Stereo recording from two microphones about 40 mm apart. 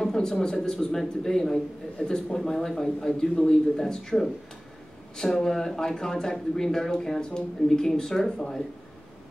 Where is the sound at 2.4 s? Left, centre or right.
Centre.